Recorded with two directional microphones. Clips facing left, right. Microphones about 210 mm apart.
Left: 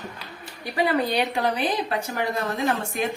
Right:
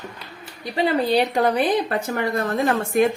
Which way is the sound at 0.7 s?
25° right (ahead or behind).